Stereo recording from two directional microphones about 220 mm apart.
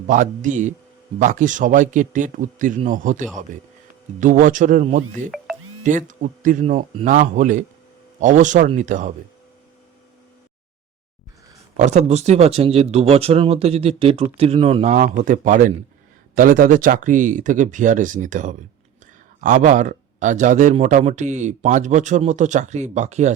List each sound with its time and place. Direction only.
0.1 s speech: 35° right (ahead or behind)
11.8 s speech: 30° right (ahead or behind)